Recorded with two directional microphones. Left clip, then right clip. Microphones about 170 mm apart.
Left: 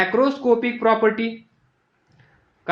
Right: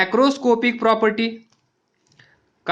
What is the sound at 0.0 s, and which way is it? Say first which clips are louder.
Speech: right 2 dB; 45° right (ahead or behind).